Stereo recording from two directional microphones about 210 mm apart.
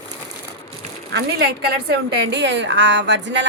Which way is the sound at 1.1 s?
50° right (ahead or behind).